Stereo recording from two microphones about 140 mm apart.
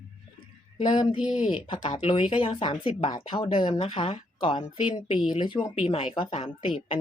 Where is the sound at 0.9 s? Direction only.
35° left (ahead or behind).